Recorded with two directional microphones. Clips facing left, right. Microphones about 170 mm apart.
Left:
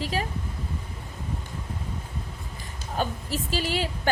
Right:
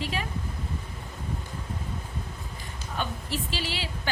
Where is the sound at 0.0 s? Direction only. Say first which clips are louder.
Left 3 dB; 40° left (ahead or behind).